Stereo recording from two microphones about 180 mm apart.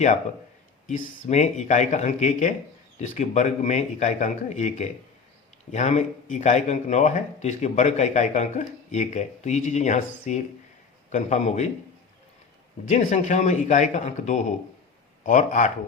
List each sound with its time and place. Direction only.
1.3 s a man's voice: 40° left (ahead or behind)
12.9 s a man's voice: 40° left (ahead or behind)